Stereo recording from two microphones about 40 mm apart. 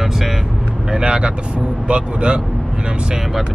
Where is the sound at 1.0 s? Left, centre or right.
Right.